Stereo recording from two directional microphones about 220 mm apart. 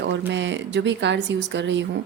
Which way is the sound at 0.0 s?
55° right (ahead or behind).